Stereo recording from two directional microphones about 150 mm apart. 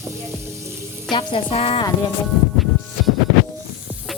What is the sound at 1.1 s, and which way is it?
Sizzle, 35° left (ahead or behind).